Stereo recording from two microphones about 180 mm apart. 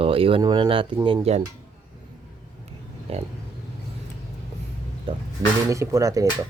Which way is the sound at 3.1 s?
35° right (ahead or behind).